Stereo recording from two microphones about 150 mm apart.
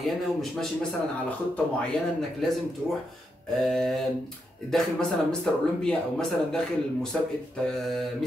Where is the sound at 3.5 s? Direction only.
5° left (ahead or behind).